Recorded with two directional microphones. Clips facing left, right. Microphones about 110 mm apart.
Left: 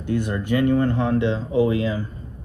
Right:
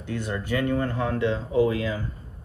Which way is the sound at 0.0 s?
20° left (ahead or behind).